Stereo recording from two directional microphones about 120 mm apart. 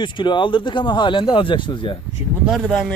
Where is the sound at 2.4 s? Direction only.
5° right (ahead or behind).